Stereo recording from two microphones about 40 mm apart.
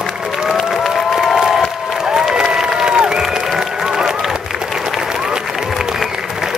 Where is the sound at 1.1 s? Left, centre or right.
Centre.